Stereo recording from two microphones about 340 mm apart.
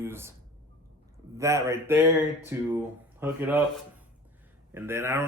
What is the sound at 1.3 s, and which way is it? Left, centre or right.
Speech, centre.